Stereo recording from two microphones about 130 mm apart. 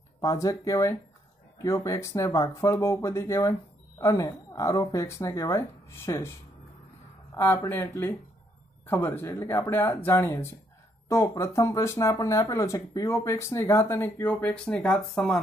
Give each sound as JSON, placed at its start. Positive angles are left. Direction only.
{"t": 0.2, "sound": "speech", "side_deg": 25}
{"t": 7.3, "sound": "speech", "side_deg": 20}